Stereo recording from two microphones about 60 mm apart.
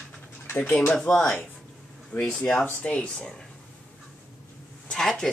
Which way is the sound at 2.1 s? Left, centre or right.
Left.